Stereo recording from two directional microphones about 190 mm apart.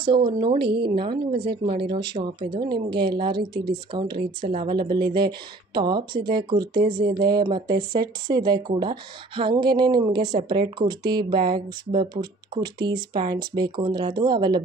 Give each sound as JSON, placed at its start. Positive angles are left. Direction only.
{"t": 0.0, "sound": "speech", "side_deg": -25}